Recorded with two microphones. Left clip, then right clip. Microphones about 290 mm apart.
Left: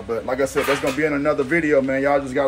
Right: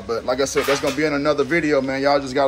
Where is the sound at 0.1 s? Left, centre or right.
Centre.